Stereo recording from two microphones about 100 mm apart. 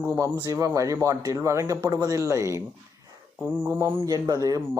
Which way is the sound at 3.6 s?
25° right (ahead or behind).